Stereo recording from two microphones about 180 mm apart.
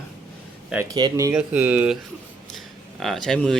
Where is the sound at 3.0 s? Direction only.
Centre (ahead or behind).